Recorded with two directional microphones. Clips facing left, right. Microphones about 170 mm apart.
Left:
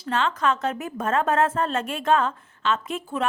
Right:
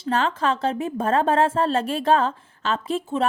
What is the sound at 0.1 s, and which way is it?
A woman's voice, 35° right (ahead or behind).